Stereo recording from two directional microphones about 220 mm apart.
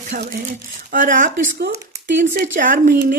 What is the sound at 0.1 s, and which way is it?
Speech, 35° right (ahead or behind).